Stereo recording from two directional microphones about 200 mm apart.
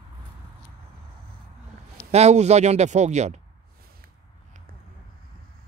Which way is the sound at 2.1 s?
35° right (ahead or behind).